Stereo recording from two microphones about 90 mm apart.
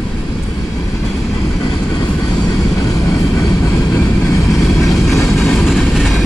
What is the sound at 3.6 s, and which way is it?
Vehicle, 35° left (ahead or behind).